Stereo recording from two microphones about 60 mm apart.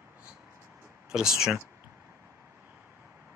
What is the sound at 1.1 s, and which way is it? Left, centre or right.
Speech, centre.